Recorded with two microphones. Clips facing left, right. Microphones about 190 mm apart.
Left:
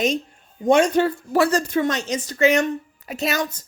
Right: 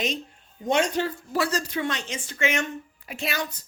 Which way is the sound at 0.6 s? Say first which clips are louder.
Left 7 dB; 50° left (ahead or behind).